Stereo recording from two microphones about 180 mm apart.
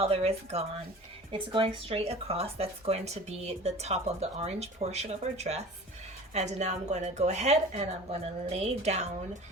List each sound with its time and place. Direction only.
0.0 s speech: 35° right (ahead or behind)